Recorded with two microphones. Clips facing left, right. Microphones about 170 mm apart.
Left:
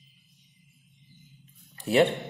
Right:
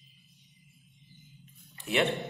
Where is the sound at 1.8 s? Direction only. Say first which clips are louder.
Left 6 dB; 35° left (ahead or behind).